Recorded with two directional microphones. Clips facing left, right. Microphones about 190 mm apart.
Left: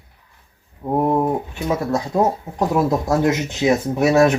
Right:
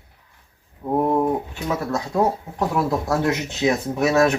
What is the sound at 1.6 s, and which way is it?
Speech, 20° left (ahead or behind).